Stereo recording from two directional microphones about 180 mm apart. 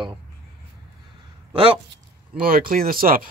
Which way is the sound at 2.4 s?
55° right (ahead or behind).